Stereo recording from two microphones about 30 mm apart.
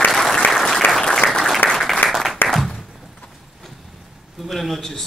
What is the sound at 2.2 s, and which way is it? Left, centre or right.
Applause, centre.